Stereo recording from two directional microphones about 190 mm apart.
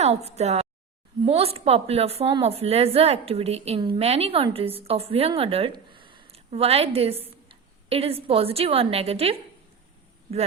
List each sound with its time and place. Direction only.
0.0 s a woman's voice: 35° right (ahead or behind)